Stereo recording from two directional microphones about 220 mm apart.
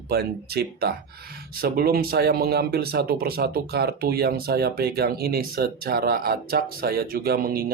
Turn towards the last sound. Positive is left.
turn(degrees=-45)  # may be behind; listen again after turning